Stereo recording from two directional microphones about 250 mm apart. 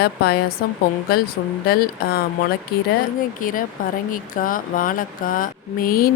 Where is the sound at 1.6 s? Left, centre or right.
Left.